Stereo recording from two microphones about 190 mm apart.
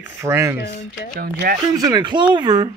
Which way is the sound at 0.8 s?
40° left (ahead or behind).